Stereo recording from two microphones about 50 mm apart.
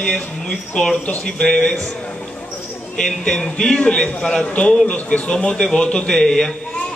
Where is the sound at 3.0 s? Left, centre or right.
Centre.